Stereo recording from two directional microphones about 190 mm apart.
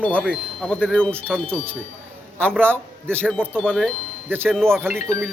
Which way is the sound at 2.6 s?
10° right (ahead or behind).